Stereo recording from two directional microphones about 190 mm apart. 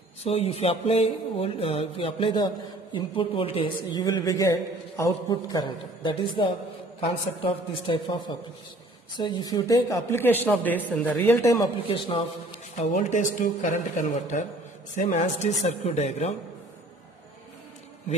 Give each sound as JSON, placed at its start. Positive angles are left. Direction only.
{"t": 0.2, "sound": "speech", "side_deg": 30}
{"t": 11.9, "sound": "a man's voice", "side_deg": 30}